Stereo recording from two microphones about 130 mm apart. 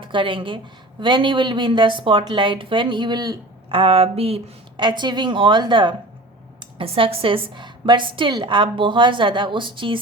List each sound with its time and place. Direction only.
0.0 s a woman's voice: 40° right (ahead or behind)
3.8 s speech: 50° right (ahead or behind)
4.8 s a woman's voice: 35° right (ahead or behind)